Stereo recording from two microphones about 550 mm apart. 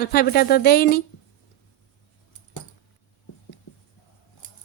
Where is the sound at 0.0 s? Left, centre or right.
Centre.